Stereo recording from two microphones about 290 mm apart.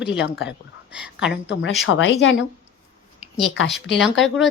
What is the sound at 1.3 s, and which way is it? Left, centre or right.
Speech, left.